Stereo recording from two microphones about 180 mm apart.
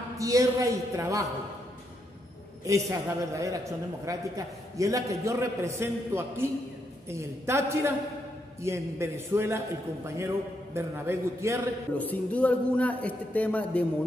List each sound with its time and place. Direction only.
0.2 s a man's voice: 20° right (ahead or behind)
2.6 s a man's voice: 20° right (ahead or behind)
12.0 s a man's voice: 10° left (ahead or behind)